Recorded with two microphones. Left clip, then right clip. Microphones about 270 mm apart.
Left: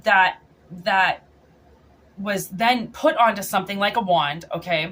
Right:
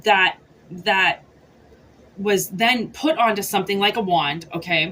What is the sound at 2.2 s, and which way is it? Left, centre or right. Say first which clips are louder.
A woman's voice: right 2 dB; centre.